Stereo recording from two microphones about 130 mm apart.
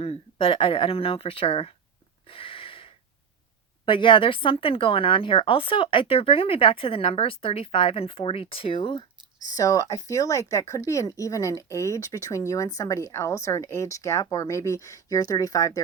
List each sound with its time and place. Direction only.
0.0 s speech: 50° left (ahead or behind)
2.2 s a sound: 45° left (ahead or behind)
3.8 s speech: 40° left (ahead or behind)
9.4 s speech: 30° left (ahead or behind)